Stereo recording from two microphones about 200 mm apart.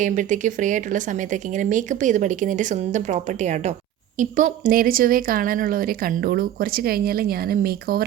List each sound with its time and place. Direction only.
0.0 s speech: 40° right (ahead or behind)